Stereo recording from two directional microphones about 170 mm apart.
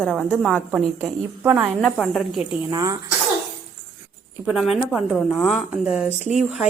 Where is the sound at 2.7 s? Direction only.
20° right (ahead or behind).